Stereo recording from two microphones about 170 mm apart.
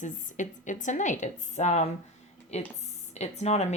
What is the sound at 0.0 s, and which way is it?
Speech, 50° left (ahead or behind).